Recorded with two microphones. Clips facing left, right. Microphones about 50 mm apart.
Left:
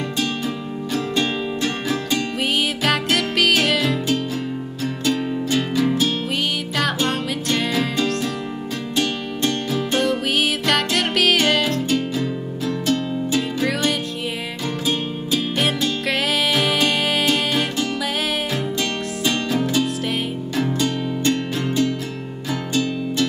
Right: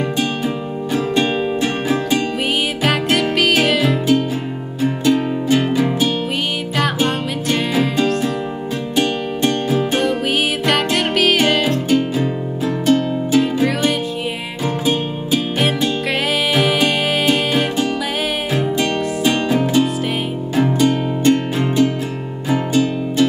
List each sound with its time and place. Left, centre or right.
0.9 s music: centre
2.8 s music: centre
7.4 s music: centre
10.7 s music: centre
16.5 s music: centre